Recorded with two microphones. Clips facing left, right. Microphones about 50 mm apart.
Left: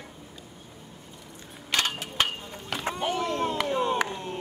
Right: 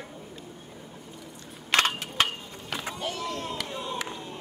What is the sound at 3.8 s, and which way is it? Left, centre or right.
Crowd, left.